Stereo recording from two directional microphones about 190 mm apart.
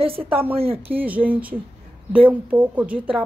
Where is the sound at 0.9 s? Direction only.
10° right (ahead or behind).